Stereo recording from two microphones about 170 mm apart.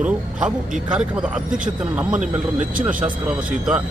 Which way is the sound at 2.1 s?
45° right (ahead or behind).